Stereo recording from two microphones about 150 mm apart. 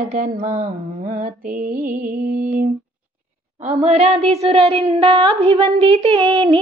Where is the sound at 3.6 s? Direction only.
50° right (ahead or behind).